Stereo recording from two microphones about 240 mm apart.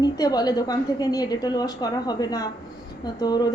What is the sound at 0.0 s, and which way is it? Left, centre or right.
A woman's voice, centre.